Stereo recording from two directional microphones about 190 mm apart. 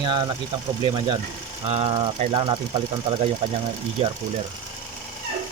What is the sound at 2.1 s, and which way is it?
Speech, 40° right (ahead or behind).